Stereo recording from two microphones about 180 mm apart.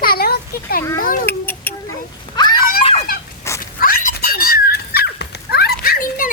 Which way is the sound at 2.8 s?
35° left (ahead or behind).